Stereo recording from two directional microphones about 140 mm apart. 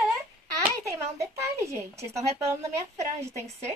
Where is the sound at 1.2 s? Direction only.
20° right (ahead or behind).